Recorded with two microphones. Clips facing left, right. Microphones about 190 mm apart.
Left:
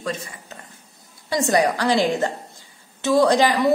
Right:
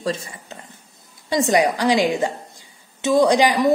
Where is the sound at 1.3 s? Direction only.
20° right (ahead or behind).